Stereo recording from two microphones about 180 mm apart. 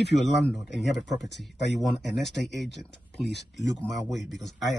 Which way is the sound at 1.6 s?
70° left (ahead or behind).